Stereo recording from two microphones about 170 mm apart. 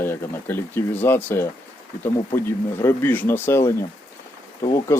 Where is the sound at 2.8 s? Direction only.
10° left (ahead or behind).